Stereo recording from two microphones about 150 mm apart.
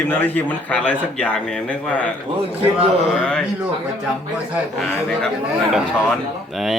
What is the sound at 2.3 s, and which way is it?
Speech, 40° right (ahead or behind).